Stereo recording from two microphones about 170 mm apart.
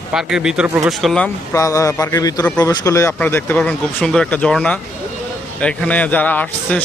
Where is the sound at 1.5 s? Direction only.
20° left (ahead or behind).